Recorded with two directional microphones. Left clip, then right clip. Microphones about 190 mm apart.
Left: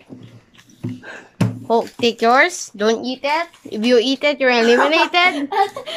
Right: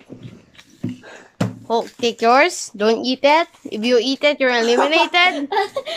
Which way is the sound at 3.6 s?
5° right (ahead or behind).